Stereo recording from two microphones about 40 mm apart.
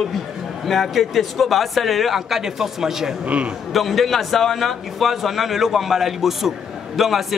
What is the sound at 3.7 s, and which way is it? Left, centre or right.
A man's voice, centre.